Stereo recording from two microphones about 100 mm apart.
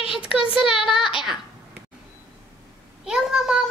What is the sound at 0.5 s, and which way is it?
Speech, 5° right (ahead or behind).